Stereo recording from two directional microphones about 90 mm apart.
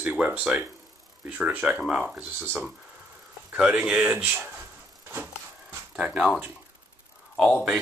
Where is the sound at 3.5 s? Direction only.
15° right (ahead or behind).